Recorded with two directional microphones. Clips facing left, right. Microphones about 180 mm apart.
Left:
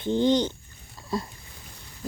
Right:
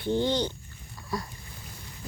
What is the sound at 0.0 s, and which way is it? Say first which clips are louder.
Speech: left 4 dB; 20° left (ahead or behind).